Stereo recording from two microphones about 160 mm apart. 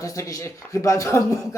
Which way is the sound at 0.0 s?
20° left (ahead or behind).